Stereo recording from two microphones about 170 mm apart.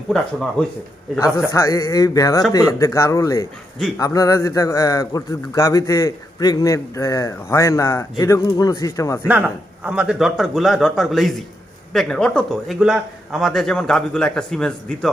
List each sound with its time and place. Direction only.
1.2 s a man's voice: 20° left (ahead or behind)
9.2 s a man's voice: 10° right (ahead or behind)